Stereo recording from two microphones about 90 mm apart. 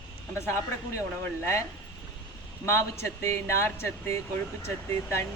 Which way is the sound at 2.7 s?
30° left (ahead or behind).